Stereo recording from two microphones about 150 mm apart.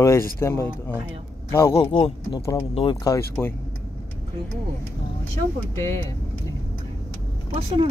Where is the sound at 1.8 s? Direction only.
40° left (ahead or behind); by 3.5 s 15° left (ahead or behind).